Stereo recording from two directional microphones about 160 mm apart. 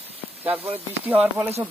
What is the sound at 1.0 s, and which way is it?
Speech, 10° right (ahead or behind).